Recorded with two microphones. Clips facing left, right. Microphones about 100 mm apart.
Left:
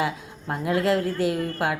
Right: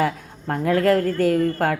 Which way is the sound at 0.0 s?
50° right (ahead or behind).